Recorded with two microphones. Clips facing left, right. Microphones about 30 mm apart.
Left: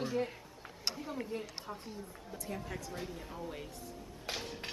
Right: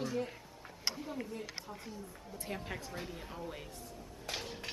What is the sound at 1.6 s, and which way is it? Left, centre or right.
Speech, left.